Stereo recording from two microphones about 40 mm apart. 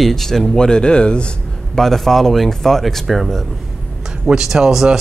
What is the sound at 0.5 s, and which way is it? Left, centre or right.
Speech, left.